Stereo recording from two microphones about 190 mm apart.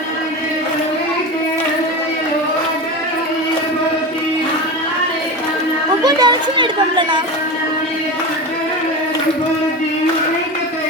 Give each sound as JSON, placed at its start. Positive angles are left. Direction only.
{"t": 6.1, "sound": "children playing", "side_deg": -20}